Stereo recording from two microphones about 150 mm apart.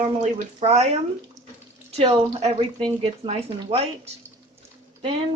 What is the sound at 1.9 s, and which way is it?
Speech, 40° right (ahead or behind).